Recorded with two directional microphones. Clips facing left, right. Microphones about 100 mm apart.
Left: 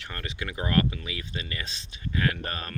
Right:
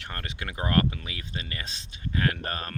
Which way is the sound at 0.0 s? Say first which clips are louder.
Left 1 dB; 45° right (ahead or behind).